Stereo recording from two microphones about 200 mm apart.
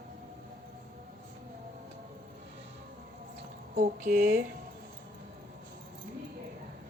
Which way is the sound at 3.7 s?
40° right (ahead or behind).